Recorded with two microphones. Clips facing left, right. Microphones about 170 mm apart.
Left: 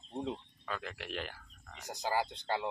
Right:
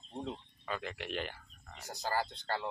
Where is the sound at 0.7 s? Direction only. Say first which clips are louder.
Right 2 dB; centre (ahead or behind).